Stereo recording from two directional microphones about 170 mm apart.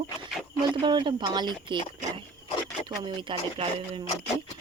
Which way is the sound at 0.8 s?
25° right (ahead or behind).